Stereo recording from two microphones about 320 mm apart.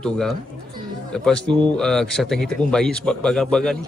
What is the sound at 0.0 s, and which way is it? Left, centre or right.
Speech, centre.